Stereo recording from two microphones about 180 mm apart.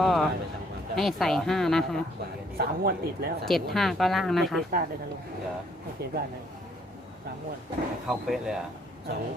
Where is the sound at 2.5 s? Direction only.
55° right (ahead or behind).